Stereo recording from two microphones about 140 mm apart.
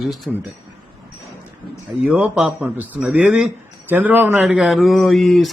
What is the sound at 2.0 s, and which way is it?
Speech, 10° right (ahead or behind).